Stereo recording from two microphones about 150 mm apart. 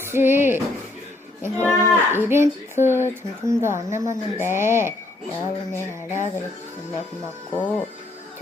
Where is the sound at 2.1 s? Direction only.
15° right (ahead or behind).